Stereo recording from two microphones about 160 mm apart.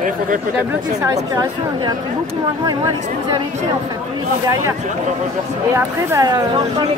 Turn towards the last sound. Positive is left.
turn(degrees=-20)  # may be behind; listen again after turning